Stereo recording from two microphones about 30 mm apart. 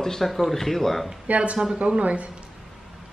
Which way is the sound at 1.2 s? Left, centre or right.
Right.